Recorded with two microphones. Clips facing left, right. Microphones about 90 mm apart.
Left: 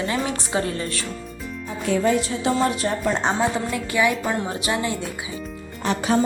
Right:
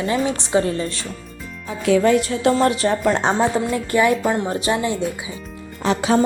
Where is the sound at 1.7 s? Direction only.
90° right; by 2.5 s 60° right (ahead or behind).